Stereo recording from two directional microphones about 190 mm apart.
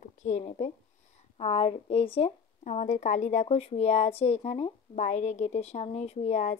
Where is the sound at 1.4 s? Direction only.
30° left (ahead or behind).